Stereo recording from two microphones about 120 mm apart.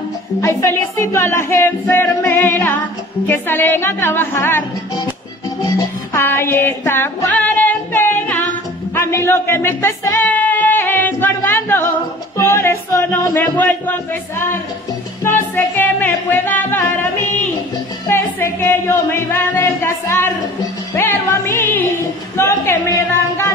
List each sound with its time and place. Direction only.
0.4 s music: 25° left (ahead or behind)
6.1 s female singing: 20° left (ahead or behind)
8.9 s music: 20° left (ahead or behind)
15.2 s music: 20° left (ahead or behind)